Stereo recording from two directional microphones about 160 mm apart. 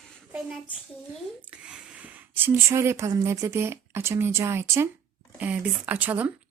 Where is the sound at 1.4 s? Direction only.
10° right (ahead or behind).